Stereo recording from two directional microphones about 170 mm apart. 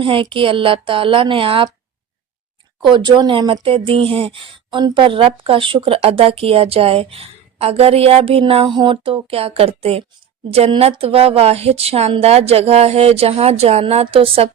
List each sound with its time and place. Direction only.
0.0 s speech: 30° right (ahead or behind)
2.8 s speech: 25° right (ahead or behind)